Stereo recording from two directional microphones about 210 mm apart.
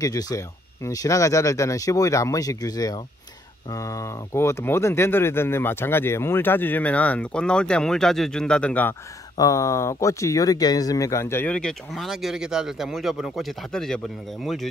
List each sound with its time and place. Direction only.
0.0 s speech: 15° left (ahead or behind); by 14.7 s centre (ahead or behind)